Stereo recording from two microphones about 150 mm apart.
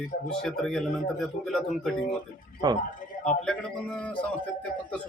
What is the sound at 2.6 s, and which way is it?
Speech, 25° right (ahead or behind).